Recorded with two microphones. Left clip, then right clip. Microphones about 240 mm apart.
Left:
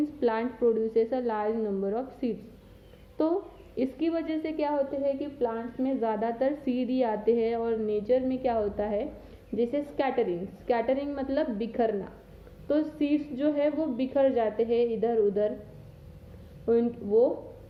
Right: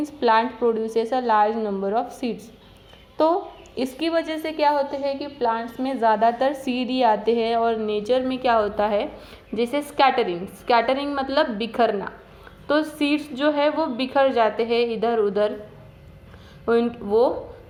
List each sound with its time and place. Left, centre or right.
0.2 s a woman's voice: centre